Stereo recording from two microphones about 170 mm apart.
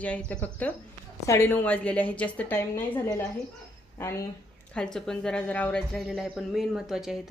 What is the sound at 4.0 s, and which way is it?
Speech, 15° left (ahead or behind).